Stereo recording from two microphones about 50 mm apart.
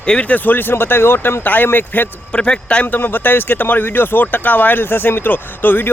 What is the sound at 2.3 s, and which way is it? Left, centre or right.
Speech, left.